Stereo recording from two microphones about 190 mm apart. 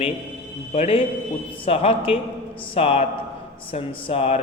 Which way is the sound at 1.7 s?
30° left (ahead or behind).